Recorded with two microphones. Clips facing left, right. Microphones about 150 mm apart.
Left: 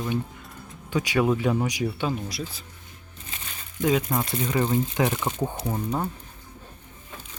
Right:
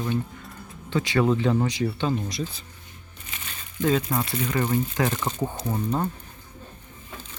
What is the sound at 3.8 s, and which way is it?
Speech, 15° left (ahead or behind).